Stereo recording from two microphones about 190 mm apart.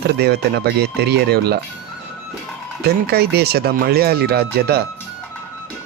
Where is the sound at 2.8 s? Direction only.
55° right (ahead or behind).